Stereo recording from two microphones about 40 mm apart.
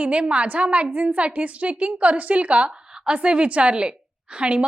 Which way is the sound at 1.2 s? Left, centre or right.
Right.